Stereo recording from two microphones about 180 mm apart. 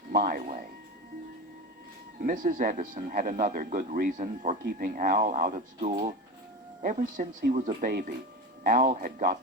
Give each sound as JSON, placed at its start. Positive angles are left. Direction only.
{"t": 0.1, "sound": "speech", "side_deg": -50}
{"t": 2.2, "sound": "speech", "side_deg": -45}